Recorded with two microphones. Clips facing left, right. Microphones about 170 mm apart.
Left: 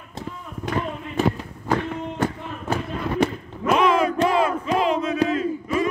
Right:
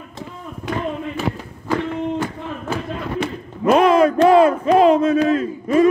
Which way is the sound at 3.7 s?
40° right (ahead or behind).